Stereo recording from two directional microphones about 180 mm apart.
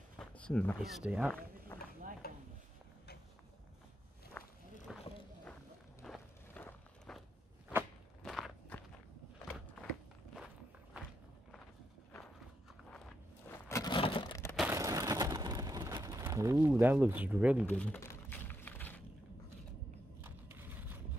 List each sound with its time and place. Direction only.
0.2 s speech: 5° left (ahead or behind)
2.2 s stir: 55° left (ahead or behind)
4.4 s walk: 5° left (ahead or behind)
4.9 s a sound: centre (ahead or behind)
6.0 s walk: 5° left (ahead or behind)
13.5 s a sound: 15° left (ahead or behind)
13.9 s crushing: 30° left (ahead or behind)
14.7 s a sound: 15° right (ahead or behind)
17.6 s typing: 10° left (ahead or behind)
20.2 s vehicle: 10° right (ahead or behind)